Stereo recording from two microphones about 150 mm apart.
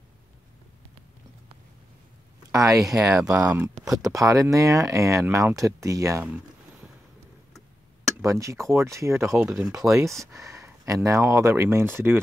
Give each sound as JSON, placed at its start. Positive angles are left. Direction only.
{"t": 2.5, "sound": "speech", "side_deg": -20}
{"t": 2.8, "sound": "speech", "side_deg": -5}
{"t": 3.9, "sound": "speech", "side_deg": -20}
{"t": 8.2, "sound": "speech", "side_deg": -20}
{"t": 9.4, "sound": "speech", "side_deg": -5}
{"t": 9.7, "sound": "speech", "side_deg": -20}
{"t": 10.2, "sound": "a sound", "side_deg": -20}
{"t": 11.1, "sound": "speech", "side_deg": -20}